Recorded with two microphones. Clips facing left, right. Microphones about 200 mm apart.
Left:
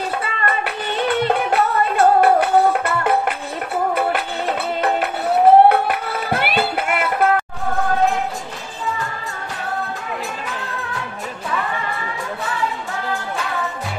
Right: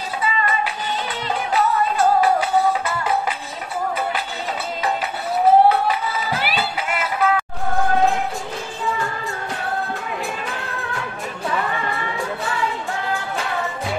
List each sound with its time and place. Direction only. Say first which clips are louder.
0.2 s music: right 1 dB; 60° left (ahead or behind)